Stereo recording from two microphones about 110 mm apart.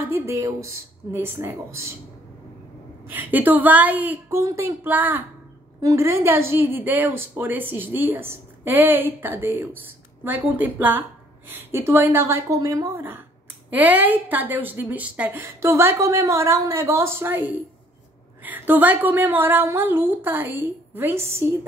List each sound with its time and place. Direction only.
0.1 s speech: 30° right (ahead or behind)
3.1 s speech: 15° right (ahead or behind)
4.4 s speech: 25° right (ahead or behind)
5.8 s speech: 25° right (ahead or behind)